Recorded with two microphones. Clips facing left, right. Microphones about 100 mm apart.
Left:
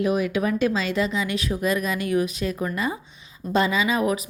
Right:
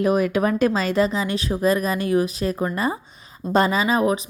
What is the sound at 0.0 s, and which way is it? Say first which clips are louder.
Speech: right 3 dB; 45° right (ahead or behind).